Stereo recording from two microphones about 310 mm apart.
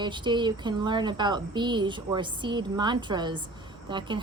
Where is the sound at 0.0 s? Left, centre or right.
Centre.